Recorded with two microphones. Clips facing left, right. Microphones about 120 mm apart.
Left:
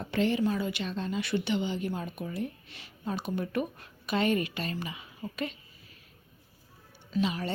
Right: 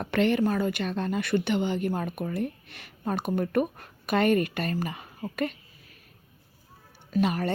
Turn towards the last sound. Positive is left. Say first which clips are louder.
# right 4 dB
turn(degrees=-55)  # may be behind; listen again after turning